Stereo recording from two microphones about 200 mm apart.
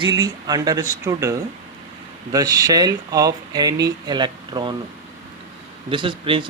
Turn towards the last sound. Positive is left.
turn(degrees=-25)  # may be behind; listen again after turning